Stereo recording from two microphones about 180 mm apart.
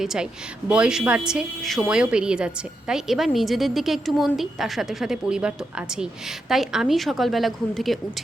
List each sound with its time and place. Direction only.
0.0 s a woman's voice: 5° right (ahead or behind)